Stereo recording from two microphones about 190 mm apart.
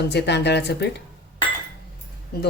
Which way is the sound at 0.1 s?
65° left (ahead or behind).